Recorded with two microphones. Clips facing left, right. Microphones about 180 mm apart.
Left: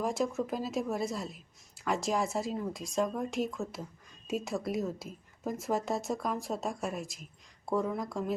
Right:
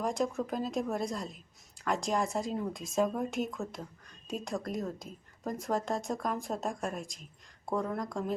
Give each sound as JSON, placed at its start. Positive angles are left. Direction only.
{"t": 0.0, "sound": "a woman's voice", "side_deg": 5}